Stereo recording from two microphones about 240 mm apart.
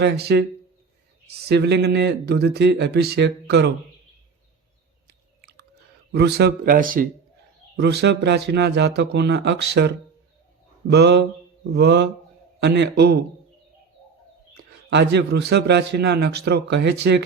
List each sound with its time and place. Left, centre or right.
0.0 s a man's voice: right
1.5 s a man's voice: right
5.0 s chewing: right
6.1 s speech: right
7.8 s a man's voice: right
14.5 s a man's voice: right